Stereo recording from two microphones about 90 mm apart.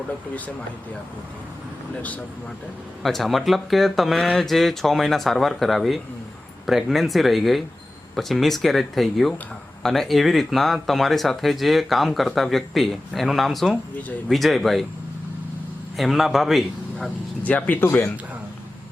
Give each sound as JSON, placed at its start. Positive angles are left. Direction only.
{"t": 2.0, "sound": "speech", "side_deg": 15}
{"t": 3.0, "sound": "speech", "side_deg": 0}
{"t": 16.0, "sound": "speech", "side_deg": 0}
{"t": 17.4, "sound": "speech", "side_deg": 20}